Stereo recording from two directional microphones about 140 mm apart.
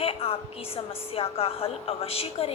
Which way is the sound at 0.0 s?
45° left (ahead or behind).